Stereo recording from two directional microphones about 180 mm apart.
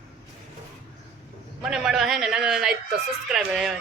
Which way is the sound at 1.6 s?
Centre (ahead or behind).